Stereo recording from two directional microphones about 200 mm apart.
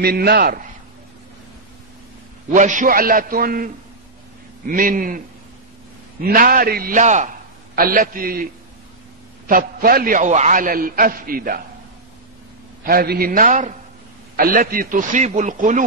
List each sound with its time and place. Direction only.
0.0 s a man's voice: 50° right (ahead or behind)
2.5 s a man's voice: 40° right (ahead or behind)
6.2 s a man's voice: 45° right (ahead or behind)
9.5 s a man's voice: 45° right (ahead or behind)
12.8 s a man's voice: 50° right (ahead or behind)